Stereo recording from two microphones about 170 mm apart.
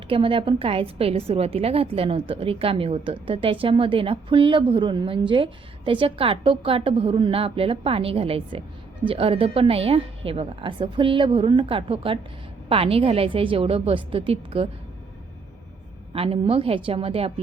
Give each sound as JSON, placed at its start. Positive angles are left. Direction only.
{"t": 0.1, "sound": "a woman's voice", "side_deg": -30}
{"t": 16.1, "sound": "a woman's voice", "side_deg": -35}